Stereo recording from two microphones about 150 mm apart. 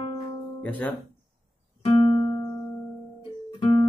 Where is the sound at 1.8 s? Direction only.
35° left (ahead or behind).